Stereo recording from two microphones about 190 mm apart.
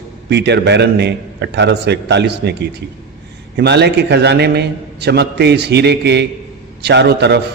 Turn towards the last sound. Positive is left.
turn(degrees=-60)  # may be behind; listen again after turning